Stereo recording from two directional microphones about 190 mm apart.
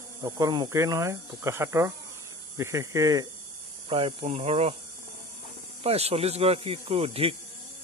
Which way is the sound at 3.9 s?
30° right (ahead or behind).